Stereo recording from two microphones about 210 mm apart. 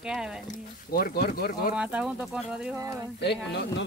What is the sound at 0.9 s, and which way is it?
Speech, 45° left (ahead or behind).